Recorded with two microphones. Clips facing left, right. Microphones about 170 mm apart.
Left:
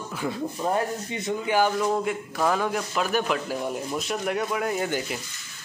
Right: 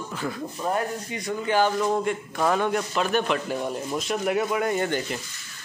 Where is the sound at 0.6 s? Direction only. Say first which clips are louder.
Even; 25° left (ahead or behind).